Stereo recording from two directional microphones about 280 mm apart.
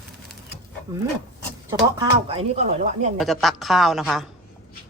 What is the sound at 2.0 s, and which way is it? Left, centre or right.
Speech, centre.